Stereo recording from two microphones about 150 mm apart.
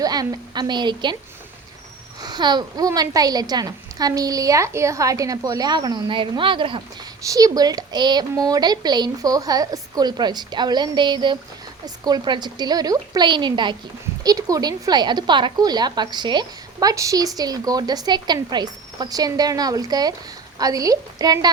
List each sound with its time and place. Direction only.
0.0 s a woman's voice: 25° right (ahead or behind)
2.2 s a woman's voice: 30° right (ahead or behind)